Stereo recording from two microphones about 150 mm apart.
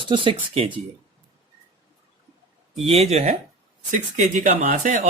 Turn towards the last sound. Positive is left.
turn(degrees=-60)  # may be behind; listen again after turning